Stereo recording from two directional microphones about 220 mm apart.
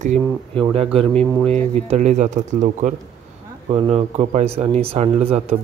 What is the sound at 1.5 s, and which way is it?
Speech, 30° right (ahead or behind).